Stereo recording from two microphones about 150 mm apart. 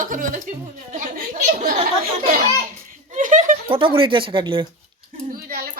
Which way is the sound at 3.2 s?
60° right (ahead or behind).